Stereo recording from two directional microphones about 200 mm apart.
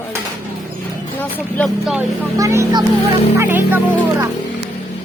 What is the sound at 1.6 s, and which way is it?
Speech, centre (ahead or behind).